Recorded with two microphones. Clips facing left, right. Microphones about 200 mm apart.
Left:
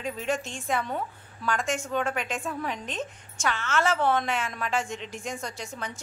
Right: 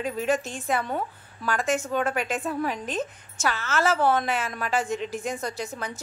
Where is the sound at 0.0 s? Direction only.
5° right (ahead or behind).